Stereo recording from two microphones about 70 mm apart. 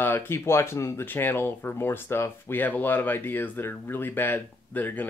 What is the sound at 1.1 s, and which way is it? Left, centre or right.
Speech, left.